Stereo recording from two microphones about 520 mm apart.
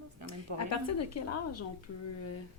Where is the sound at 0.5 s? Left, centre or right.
Left.